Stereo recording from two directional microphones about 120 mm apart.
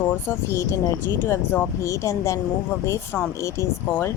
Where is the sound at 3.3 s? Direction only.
25° left (ahead or behind).